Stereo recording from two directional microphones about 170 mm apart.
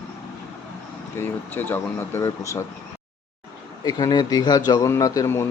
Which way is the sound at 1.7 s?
15° left (ahead or behind).